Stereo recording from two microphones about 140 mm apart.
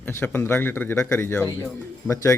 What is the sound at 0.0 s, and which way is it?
A man's voice, 15° left (ahead or behind).